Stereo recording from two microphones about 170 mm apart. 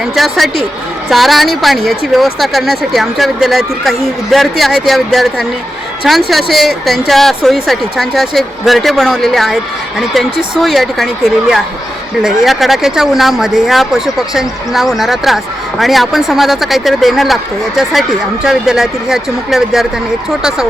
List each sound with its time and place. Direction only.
0.0 s speech: centre (ahead or behind)